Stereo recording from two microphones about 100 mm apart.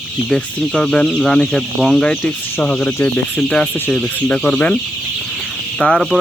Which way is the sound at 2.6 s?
15° left (ahead or behind).